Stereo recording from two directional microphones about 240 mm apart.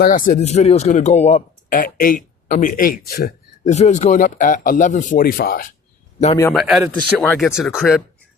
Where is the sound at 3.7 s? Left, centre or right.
Left.